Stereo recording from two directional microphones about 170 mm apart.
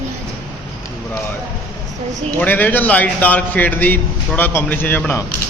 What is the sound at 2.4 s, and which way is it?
A man's voice, 10° left (ahead or behind).